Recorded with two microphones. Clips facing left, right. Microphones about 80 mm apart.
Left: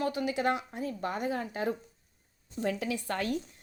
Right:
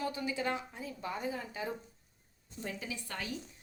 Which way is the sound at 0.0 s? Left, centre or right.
Left.